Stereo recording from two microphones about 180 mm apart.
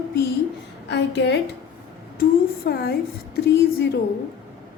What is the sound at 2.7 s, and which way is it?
Speech, 60° left (ahead or behind).